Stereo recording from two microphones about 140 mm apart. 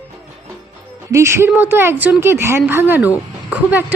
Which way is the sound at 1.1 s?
20° right (ahead or behind).